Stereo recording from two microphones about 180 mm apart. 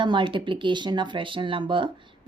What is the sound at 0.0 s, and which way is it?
A woman's voice, 25° right (ahead or behind).